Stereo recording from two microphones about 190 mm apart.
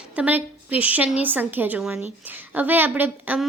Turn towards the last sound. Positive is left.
turn(degrees=-10)  # may be behind; listen again after turning